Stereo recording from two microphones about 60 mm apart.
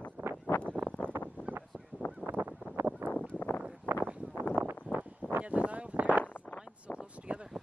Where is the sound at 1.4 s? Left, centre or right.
Left.